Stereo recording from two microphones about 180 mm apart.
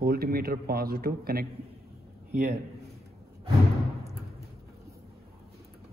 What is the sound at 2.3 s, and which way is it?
Speech, 40° right (ahead or behind).